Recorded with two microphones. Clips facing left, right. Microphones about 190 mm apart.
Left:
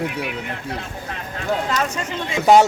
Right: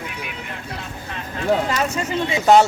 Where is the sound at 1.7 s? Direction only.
5° right (ahead or behind).